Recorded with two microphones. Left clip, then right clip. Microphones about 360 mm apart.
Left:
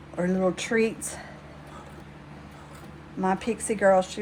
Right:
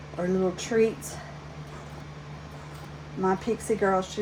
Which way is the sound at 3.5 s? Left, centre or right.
Left.